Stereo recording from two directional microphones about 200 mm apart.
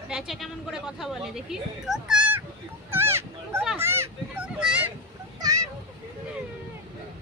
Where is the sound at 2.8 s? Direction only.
10° right (ahead or behind).